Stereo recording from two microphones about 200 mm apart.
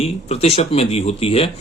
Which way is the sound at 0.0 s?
30° left (ahead or behind).